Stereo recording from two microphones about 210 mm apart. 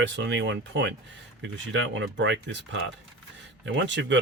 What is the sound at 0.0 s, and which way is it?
Speech, 60° right (ahead or behind).